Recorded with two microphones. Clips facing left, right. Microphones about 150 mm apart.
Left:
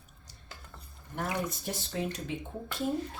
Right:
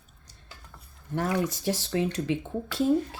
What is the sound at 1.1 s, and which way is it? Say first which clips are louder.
Speech: right 6 dB; 90° right.